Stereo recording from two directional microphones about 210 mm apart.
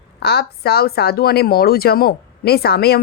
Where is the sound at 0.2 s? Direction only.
50° left (ahead or behind).